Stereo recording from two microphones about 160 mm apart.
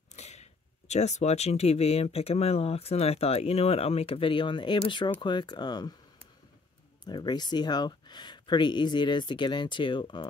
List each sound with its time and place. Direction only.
0.1 s speech: 45° left (ahead or behind)